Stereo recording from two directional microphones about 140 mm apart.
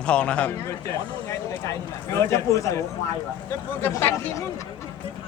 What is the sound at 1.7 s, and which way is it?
Speech, 20° left (ahead or behind).